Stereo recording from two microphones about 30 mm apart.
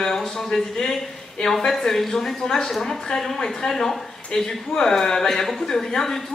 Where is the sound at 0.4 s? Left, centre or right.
Centre.